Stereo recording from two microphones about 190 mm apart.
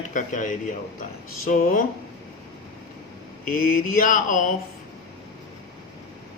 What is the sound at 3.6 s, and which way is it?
Speech, 45° left (ahead or behind).